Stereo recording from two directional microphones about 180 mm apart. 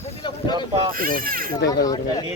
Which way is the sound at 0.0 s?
30° left (ahead or behind).